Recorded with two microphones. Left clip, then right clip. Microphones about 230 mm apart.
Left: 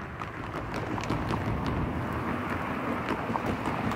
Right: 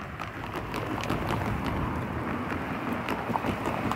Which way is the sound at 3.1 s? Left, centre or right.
Right.